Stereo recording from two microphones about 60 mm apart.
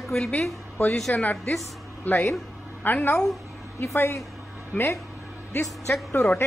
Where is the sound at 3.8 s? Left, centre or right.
Left.